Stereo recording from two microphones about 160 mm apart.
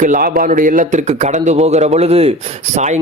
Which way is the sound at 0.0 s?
60° right (ahead or behind).